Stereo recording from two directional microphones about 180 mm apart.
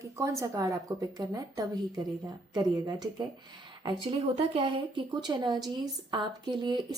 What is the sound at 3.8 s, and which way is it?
A woman's voice, 30° right (ahead or behind).